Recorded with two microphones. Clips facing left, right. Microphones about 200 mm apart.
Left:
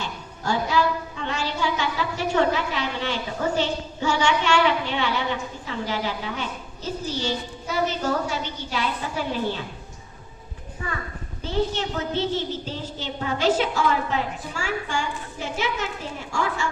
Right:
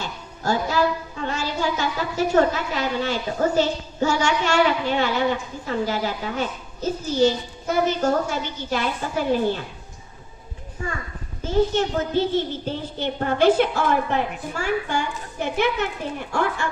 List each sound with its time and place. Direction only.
0.0 s a woman's voice: 40° right (ahead or behind)
11.4 s speech: 50° right (ahead or behind)